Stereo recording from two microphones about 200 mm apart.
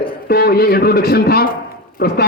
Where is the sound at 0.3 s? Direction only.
50° left (ahead or behind).